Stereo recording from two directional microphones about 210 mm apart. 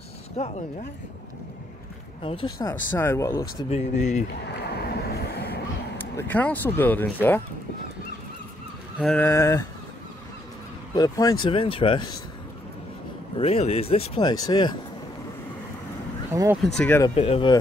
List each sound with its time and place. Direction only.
0.4 s speech: 35° left (ahead or behind)
2.2 s speech: 25° left (ahead or behind)
2.9 s speech: 10° left (ahead or behind)
3.7 s speech: 35° left (ahead or behind)
4.5 s a sound: 50° left (ahead or behind)
5.9 s speech: 10° left (ahead or behind)
8.9 s speech: 5° left (ahead or behind)
11.0 s speech: 15° left (ahead or behind)
13.4 s speech: 30° left (ahead or behind)
16.3 s speech: 10° right (ahead or behind)
16.6 s speech: 5° left (ahead or behind)
17.1 s speech: 25° left (ahead or behind)